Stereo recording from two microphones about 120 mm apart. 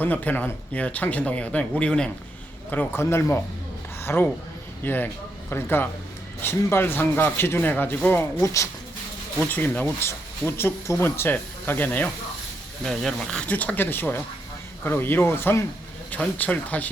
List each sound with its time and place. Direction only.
0.0 s a man's voice: 15° left (ahead or behind)
12.8 s speech: centre (ahead or behind)